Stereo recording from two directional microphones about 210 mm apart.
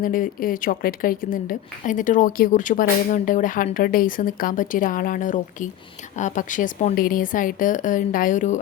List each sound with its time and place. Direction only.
0.0 s a woman's voice: 40° left (ahead or behind)